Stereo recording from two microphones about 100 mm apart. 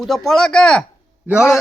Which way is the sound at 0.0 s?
Centre (ahead or behind).